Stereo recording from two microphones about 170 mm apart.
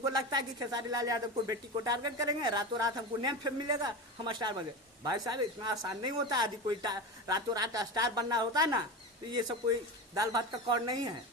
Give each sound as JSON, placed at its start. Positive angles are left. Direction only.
{"t": 0.0, "sound": "speech", "side_deg": -20}
{"t": 10.2, "sound": "speech", "side_deg": -20}